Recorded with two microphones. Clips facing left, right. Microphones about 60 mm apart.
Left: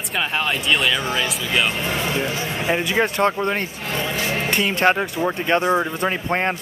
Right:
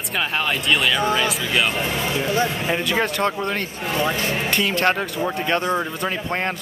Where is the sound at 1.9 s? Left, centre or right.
Left.